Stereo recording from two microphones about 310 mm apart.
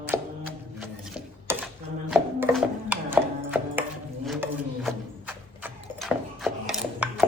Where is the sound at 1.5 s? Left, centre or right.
Centre.